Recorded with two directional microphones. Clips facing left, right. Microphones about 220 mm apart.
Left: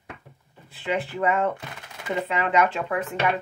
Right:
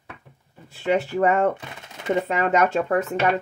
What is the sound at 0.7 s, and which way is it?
Speech, 40° right (ahead or behind).